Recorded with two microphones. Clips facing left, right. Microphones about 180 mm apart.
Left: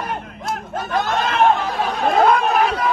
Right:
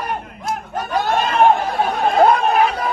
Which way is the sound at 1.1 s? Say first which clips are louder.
Right 3 dB; 55° right (ahead or behind).